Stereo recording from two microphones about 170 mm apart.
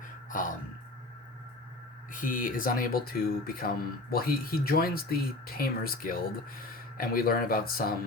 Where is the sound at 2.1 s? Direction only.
50° left (ahead or behind).